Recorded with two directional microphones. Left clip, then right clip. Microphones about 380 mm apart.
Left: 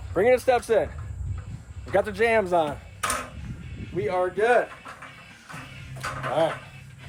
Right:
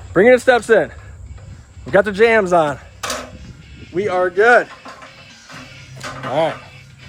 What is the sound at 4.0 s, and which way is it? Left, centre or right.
Speech, right.